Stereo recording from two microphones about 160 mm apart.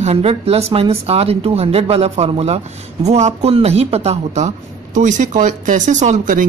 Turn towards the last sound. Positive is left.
turn(degrees=-50)  # may be behind; listen again after turning